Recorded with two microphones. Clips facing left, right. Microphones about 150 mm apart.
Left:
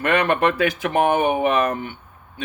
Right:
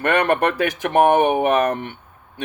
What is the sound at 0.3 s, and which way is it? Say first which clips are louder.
Speech: right 1 dB; 45° right (ahead or behind).